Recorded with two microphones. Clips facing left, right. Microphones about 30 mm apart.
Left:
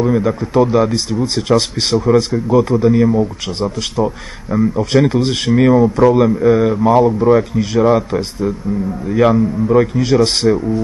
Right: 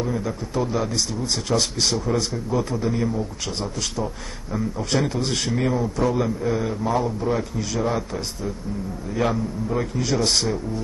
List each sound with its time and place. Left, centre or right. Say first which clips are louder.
0.0 s a man's voice: left 11 dB; left
5.3 s a man's voice: left 9 dB; centre
5.6 s speech: left 14 dB; left
9.2 s a man's voice: left 11 dB; left
9.7 s a man's voice: left 11 dB; left